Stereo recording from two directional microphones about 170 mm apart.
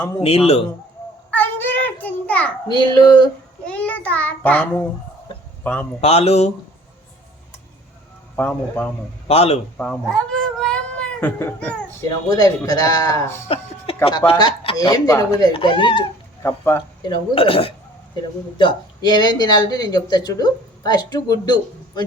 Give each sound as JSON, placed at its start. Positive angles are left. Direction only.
{"t": 0.2, "sound": "speech", "side_deg": 35}
{"t": 1.3, "sound": "child singing", "side_deg": 10}
{"t": 2.6, "sound": "speech", "side_deg": 25}
{"t": 3.7, "sound": "a child's voice", "side_deg": 10}
{"t": 6.0, "sound": "speech", "side_deg": 40}
{"t": 8.4, "sound": "a child's voice", "side_deg": 10}
{"t": 9.2, "sound": "speech", "side_deg": 35}
{"t": 9.7, "sound": "a child's voice", "side_deg": 10}
{"t": 10.6, "sound": "baby cry", "side_deg": 5}
{"t": 12.0, "sound": "speech", "side_deg": 20}
{"t": 13.5, "sound": "speech", "side_deg": 35}
{"t": 16.4, "sound": "a child's voice", "side_deg": 15}
{"t": 17.0, "sound": "speech", "side_deg": 30}